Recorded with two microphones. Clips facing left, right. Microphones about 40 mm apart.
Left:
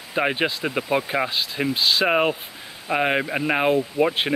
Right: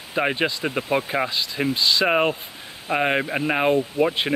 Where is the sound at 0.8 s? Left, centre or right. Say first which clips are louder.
Even; left.